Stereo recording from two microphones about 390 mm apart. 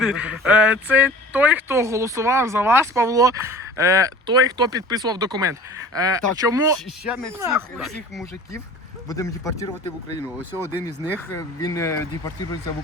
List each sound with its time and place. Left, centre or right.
0.0 s speech: centre
11.2 s speech: centre